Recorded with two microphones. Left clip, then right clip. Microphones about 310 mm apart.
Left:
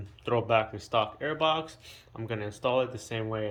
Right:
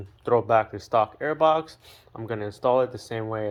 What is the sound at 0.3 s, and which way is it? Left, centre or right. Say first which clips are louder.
Speech: right 5 dB; centre.